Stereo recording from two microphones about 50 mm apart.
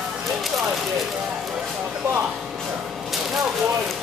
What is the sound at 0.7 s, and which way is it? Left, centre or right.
Speech, centre.